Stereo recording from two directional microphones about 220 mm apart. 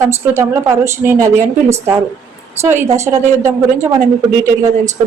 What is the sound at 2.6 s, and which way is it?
A woman's voice, 10° right (ahead or behind).